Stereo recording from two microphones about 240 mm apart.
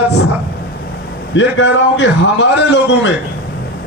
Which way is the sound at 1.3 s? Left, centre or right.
Left.